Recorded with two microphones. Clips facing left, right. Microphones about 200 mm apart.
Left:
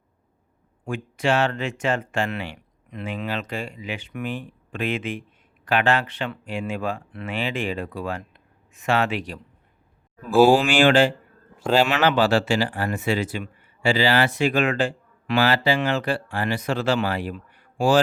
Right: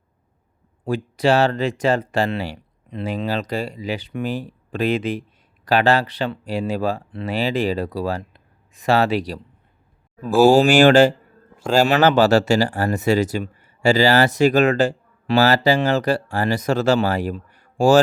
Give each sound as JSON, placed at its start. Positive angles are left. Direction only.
{"t": 0.9, "sound": "speech", "side_deg": -35}